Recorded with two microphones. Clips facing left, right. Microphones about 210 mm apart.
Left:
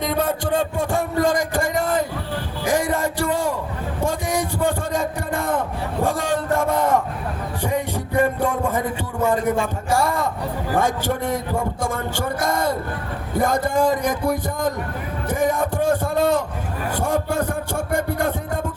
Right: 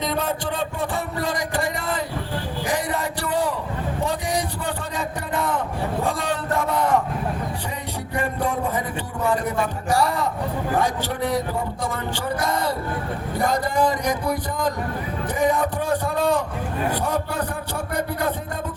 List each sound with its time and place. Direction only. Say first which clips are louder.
0.0 s music: left 3 dB; 50° left (ahead or behind)
2.6 s a sound: left 6 dB; 45° left (ahead or behind)
7.7 s music: left 6 dB; 50° left (ahead or behind)
9.2 s a sound: left 3 dB; 50° left (ahead or behind)
10.8 s music: left 4 dB; 50° left (ahead or behind)
13.4 s speech: left 2 dB; 50° left (ahead or behind)
15.3 s music: left 1 dB; 45° left (ahead or behind)
16.9 s a sound: left 3 dB; 45° left (ahead or behind)
17.9 s music: left 2 dB; 50° left (ahead or behind)